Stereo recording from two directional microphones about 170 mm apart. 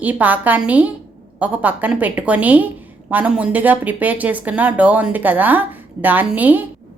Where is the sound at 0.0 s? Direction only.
10° right (ahead or behind).